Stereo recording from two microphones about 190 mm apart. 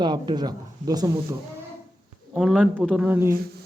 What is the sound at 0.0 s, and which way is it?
Speech, 25° right (ahead or behind).